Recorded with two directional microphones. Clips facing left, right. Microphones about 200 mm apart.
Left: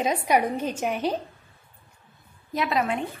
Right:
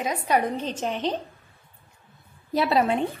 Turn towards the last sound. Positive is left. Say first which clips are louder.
# right 4 dB
turn(degrees=-30)  # may be behind; listen again after turning